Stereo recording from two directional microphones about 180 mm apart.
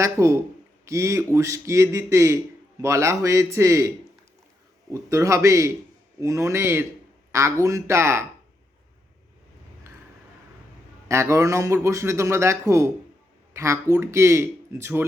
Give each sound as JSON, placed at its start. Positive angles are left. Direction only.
{"t": 0.0, "sound": "speech", "side_deg": -15}
{"t": 11.1, "sound": "speech", "side_deg": -15}